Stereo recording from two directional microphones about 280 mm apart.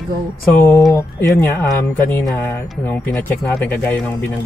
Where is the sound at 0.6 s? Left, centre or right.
Centre.